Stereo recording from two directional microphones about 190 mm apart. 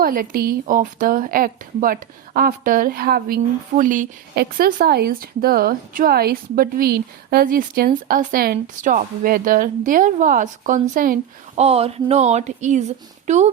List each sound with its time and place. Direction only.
0.0 s speech: 50° right (ahead or behind)
11.5 s speech: 30° right (ahead or behind)